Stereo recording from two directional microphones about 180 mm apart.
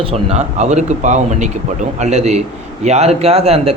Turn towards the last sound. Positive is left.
turn(degrees=-35)  # may be behind; listen again after turning